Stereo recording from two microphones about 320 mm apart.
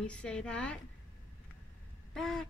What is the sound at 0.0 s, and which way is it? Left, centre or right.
Speech, centre.